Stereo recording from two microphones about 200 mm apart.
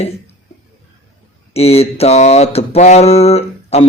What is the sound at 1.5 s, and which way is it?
Speech, 30° left (ahead or behind).